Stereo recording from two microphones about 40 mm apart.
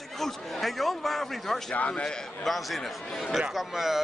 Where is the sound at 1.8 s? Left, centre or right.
Left.